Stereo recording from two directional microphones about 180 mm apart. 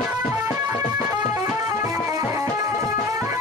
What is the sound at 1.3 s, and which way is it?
Music, 20° right (ahead or behind).